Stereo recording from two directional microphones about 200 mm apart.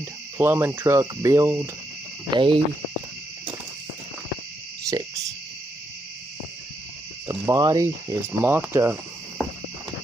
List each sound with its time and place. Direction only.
0.4 s speech: 10° right (ahead or behind)
2.3 s speech: 25° right (ahead or behind)
4.8 s speech: 15° right (ahead or behind)
7.2 s speech: 15° right (ahead or behind)